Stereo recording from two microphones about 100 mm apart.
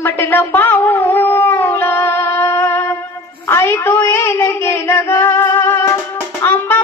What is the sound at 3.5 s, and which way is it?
Child singing, 25° left (ahead or behind).